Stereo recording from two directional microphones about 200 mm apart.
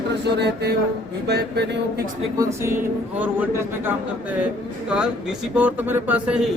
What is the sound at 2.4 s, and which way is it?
A man's voice, 15° right (ahead or behind).